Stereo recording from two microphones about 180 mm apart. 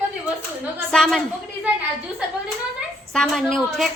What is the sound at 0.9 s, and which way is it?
Speech, centre (ahead or behind).